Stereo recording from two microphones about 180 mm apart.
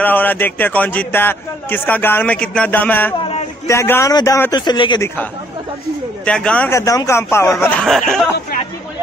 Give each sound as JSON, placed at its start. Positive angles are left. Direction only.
{"t": 0.0, "sound": "a man's voice", "side_deg": 10}
{"t": 3.2, "sound": "a sound", "side_deg": 35}
{"t": 3.6, "sound": "a man's voice", "side_deg": 15}
{"t": 6.2, "sound": "speech", "side_deg": 5}
{"t": 6.7, "sound": "a man's voice", "side_deg": 15}
{"t": 7.8, "sound": "speech", "side_deg": 0}